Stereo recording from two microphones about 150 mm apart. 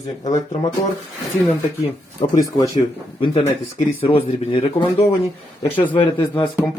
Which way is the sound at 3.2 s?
35° left (ahead or behind).